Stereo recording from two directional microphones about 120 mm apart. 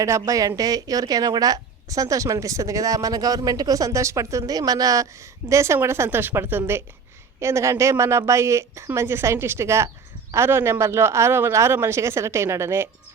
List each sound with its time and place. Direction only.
0.3 s a woman's voice: 30° right (ahead or behind)